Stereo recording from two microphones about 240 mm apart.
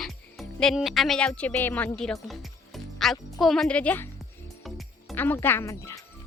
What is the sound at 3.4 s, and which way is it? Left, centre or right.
Music, centre.